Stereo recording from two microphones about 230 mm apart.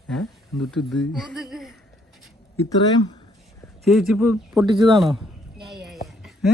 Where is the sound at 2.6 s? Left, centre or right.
Centre.